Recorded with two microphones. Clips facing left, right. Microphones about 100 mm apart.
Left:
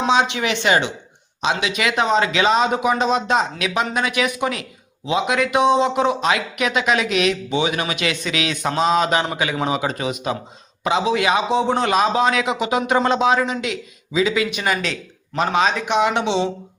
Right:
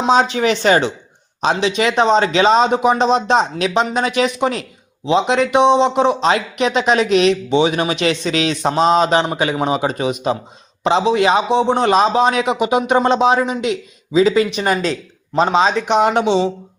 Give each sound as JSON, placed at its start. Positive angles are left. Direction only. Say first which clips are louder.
{"t": 0.1, "sound": "speech", "louder": "right 6 dB", "side_deg": -40}
{"t": 9.6, "sound": "speech", "louder": "right 4 dB", "side_deg": -25}
{"t": 15.4, "sound": "speech", "louder": "right 4 dB", "side_deg": -25}
{"t": 15.9, "sound": "speech", "louder": "right 4 dB", "side_deg": -45}